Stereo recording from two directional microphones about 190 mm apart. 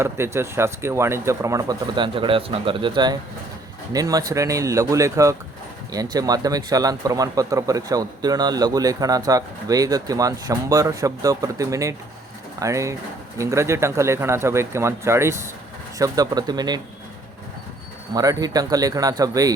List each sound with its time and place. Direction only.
0.0 s speech: 15° right (ahead or behind)
18.1 s speech: 20° right (ahead or behind)